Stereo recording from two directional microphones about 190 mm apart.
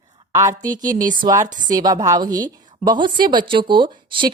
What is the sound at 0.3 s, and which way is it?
A woman's voice, 20° right (ahead or behind).